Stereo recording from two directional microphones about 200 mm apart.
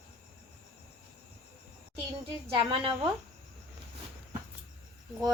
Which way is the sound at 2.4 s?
25° right (ahead or behind).